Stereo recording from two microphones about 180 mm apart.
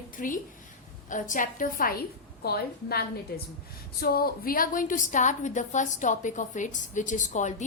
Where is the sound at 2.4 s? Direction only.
60° left (ahead or behind).